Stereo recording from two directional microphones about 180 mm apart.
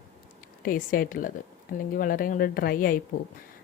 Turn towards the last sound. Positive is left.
turn(degrees=50)  # may be behind; listen again after turning